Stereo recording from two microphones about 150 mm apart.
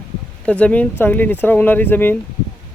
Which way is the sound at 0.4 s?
10° left (ahead or behind).